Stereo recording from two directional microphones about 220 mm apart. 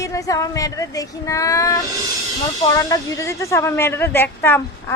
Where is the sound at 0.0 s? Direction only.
15° left (ahead or behind).